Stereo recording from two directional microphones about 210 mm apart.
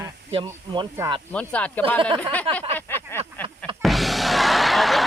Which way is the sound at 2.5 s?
25° right (ahead or behind).